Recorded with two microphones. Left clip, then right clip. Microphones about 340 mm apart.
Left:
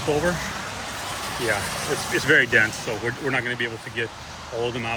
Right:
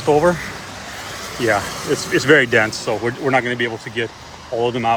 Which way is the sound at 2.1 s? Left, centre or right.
Centre.